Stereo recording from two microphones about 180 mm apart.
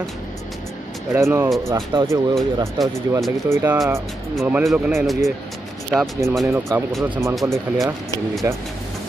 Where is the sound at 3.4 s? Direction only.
15° right (ahead or behind).